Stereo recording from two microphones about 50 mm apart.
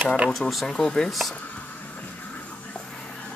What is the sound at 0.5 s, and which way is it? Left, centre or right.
Speech, centre.